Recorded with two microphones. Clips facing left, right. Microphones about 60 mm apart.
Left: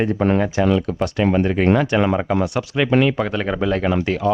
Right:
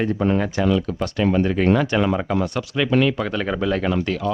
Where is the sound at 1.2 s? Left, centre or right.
Centre.